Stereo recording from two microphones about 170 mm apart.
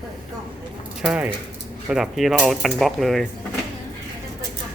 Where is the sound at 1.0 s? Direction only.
5° right (ahead or behind).